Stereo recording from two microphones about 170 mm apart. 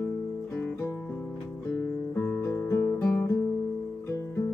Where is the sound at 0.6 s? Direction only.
10° left (ahead or behind).